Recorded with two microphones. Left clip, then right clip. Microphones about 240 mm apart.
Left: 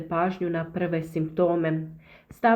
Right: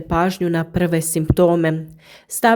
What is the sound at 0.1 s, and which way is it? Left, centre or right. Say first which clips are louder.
A woman's voice: right 7 dB; right.